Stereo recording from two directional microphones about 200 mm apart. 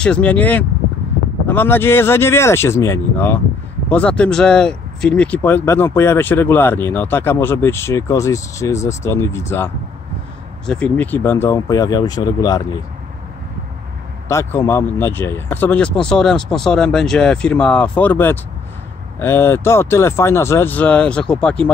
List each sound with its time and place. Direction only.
0.0 s speech: 5° left (ahead or behind)
10.7 s speech: 5° left (ahead or behind)
14.3 s speech: 15° left (ahead or behind)